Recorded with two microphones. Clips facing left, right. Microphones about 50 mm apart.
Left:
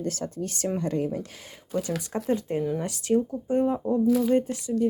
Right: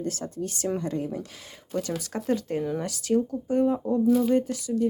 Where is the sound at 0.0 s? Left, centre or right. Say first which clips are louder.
Left 1 dB; left.